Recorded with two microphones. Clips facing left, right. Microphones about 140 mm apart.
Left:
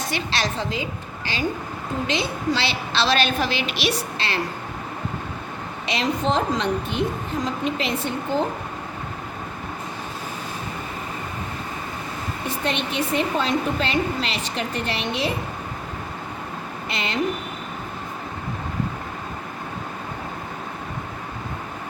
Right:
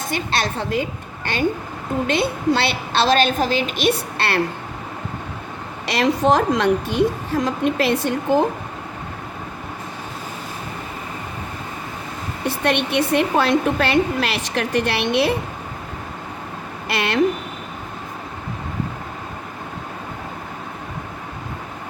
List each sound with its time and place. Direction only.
0.1 s a woman's voice: 50° right (ahead or behind)
5.8 s a woman's voice: 70° right (ahead or behind)
12.5 s a woman's voice: 75° right (ahead or behind)
16.9 s a woman's voice: 70° right (ahead or behind)